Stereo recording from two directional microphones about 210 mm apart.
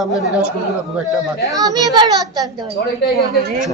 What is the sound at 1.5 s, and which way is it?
A child's voice, 15° right (ahead or behind).